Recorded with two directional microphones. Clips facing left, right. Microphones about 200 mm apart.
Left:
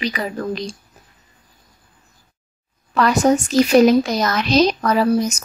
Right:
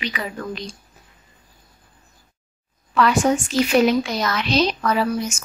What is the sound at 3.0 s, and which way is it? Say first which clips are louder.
A woman's voice: left 2 dB; 40° left (ahead or behind).